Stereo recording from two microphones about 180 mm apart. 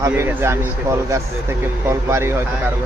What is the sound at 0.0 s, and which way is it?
Speech, 15° right (ahead or behind).